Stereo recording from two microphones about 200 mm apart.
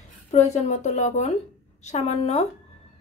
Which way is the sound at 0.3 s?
35° left (ahead or behind).